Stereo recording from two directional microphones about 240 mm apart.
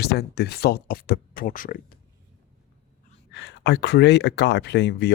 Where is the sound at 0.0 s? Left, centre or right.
Left.